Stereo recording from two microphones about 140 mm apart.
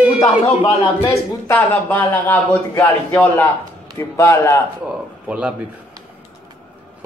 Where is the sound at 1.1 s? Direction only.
15° left (ahead or behind).